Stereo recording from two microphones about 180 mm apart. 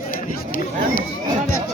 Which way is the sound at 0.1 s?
50° left (ahead or behind).